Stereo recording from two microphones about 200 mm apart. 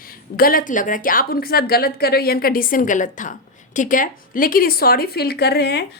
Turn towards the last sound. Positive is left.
turn(degrees=55)  # may be behind; listen again after turning